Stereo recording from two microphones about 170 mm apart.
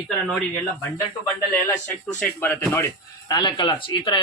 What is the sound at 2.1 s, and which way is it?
Speech, 10° left (ahead or behind).